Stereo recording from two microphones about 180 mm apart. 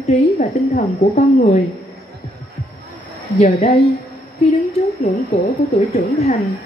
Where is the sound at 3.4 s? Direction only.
35° left (ahead or behind).